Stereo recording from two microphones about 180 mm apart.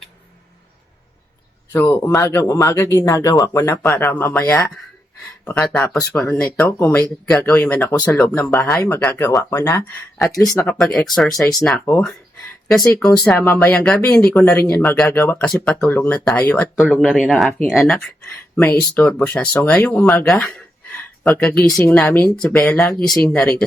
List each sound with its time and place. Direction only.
1.7 s speech: 15° left (ahead or behind)
5.5 s speech: 5° left (ahead or behind)
8.5 s speech: 20° left (ahead or behind)
10.7 s speech: 5° left (ahead or behind)
16.8 s speech: centre (ahead or behind)